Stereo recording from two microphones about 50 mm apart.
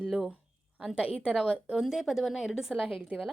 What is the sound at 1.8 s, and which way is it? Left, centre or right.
A woman's voice, centre.